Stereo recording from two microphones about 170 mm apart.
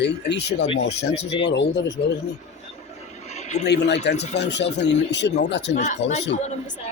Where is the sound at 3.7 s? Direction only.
85° left.